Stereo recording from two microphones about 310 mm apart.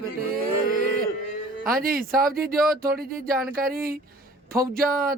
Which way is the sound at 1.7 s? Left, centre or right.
Right.